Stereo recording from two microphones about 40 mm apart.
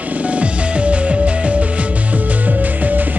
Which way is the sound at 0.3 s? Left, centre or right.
Right.